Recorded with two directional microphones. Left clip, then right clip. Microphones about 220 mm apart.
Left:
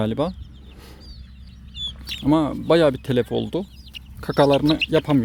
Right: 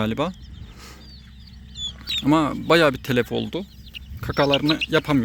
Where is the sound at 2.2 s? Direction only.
5° left (ahead or behind).